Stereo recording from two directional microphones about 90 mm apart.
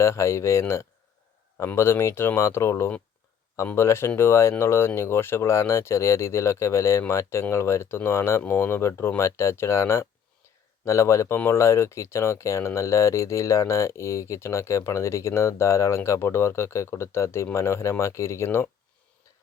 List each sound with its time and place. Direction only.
0.0 s speech: 30° left (ahead or behind)